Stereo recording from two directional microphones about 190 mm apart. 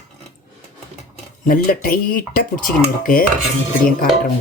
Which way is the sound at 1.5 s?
50° left (ahead or behind).